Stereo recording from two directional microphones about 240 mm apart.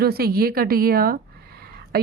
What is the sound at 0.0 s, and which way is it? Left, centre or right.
A woman's voice, right.